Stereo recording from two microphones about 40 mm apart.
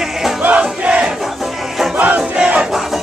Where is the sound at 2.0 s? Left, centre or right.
Right.